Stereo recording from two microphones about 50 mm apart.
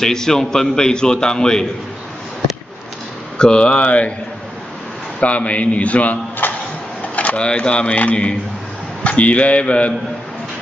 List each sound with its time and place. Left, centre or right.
0.0 s a man's voice: centre
3.3 s speech: centre
5.2 s speech: left
6.4 s music: left
7.2 s speech: left